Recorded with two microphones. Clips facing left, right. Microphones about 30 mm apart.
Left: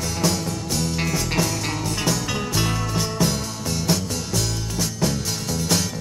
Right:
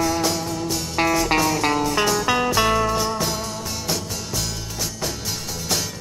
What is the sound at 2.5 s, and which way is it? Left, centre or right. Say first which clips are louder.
Music: right 5 dB; centre.